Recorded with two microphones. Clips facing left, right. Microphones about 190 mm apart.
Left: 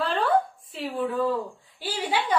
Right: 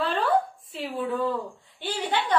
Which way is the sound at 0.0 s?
Centre (ahead or behind).